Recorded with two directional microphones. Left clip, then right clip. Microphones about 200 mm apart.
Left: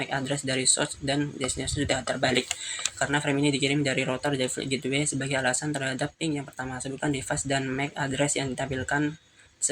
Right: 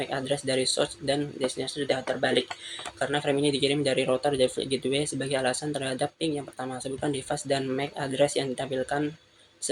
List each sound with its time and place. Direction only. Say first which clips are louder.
0.0 s speech: right 1 dB; 25° left (ahead or behind)